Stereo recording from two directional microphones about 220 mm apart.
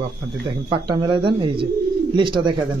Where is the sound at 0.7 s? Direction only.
20° right (ahead or behind).